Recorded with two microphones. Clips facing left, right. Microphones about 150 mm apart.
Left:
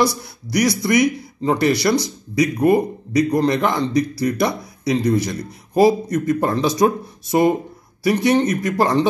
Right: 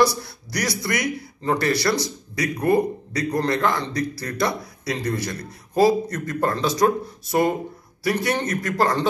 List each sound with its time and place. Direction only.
0.2 s speech: 15° left (ahead or behind)